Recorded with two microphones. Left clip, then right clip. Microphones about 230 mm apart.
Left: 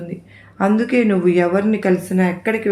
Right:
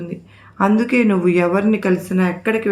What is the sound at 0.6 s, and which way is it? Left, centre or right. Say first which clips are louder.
Speech: right 1 dB; centre.